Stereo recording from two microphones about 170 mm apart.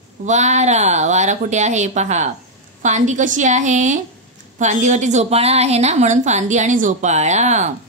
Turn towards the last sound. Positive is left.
turn(degrees=-45)  # may be behind; listen again after turning